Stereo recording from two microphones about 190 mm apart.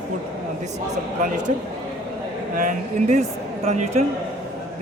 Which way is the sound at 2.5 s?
40° right (ahead or behind).